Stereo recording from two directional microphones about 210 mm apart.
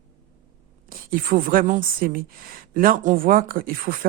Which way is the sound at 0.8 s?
40° right (ahead or behind).